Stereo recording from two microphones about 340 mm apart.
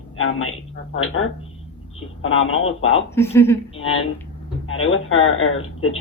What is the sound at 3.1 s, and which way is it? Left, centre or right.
Speech, centre.